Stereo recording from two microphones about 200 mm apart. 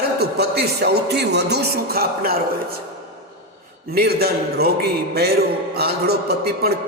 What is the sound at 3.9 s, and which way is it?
A man's voice, 50° right (ahead or behind).